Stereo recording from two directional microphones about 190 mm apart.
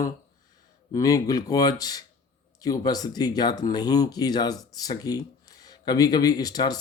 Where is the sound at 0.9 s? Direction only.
20° left (ahead or behind).